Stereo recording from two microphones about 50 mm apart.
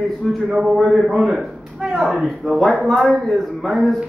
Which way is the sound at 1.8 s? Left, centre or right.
Right.